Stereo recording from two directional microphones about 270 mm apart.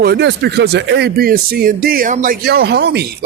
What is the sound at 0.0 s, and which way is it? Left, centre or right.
Speech, right.